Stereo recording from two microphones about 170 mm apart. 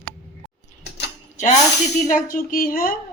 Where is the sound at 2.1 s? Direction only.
55° left (ahead or behind).